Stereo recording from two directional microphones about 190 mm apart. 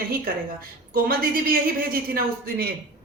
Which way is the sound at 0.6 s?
50° right (ahead or behind).